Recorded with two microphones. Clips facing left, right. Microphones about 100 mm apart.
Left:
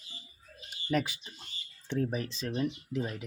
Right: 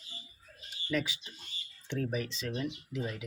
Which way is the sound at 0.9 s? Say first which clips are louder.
Left 3 dB; 50° left (ahead or behind).